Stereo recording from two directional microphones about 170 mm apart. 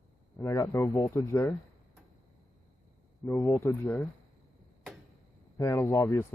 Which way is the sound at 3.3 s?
15° left (ahead or behind).